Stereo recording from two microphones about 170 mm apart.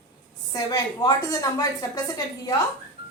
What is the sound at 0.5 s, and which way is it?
A woman's voice, 20° left (ahead or behind).